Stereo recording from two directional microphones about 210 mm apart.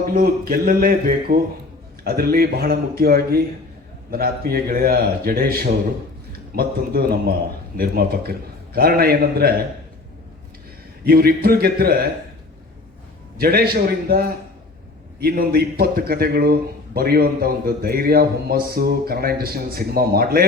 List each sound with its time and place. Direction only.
0.1 s a man's voice: 45° right (ahead or behind)
11.0 s a man's voice: 45° right (ahead or behind)
13.3 s a man's voice: 45° right (ahead or behind)